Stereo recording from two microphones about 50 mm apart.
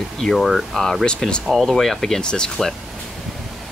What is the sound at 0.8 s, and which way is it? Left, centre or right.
Speech, centre.